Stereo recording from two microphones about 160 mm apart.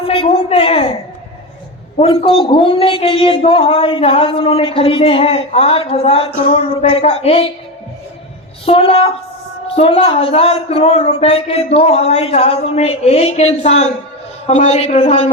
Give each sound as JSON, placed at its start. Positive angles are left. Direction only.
{"t": 0.1, "sound": "a sound", "side_deg": 35}
{"t": 2.0, "sound": "speech", "side_deg": 35}
{"t": 8.6, "sound": "a man's voice", "side_deg": 35}